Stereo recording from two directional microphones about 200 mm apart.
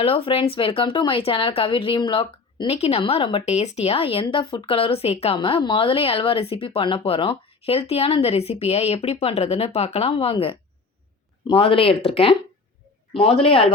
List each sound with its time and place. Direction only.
0.0 s speech: 30° left (ahead or behind)